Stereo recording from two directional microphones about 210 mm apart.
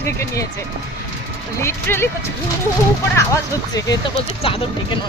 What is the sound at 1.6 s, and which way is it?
Speech, 10° left (ahead or behind).